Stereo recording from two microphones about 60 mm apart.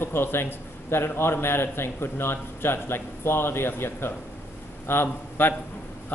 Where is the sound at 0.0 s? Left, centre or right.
Left.